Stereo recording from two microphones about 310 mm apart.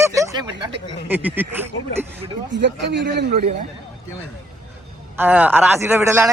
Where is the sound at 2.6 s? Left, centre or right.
Right.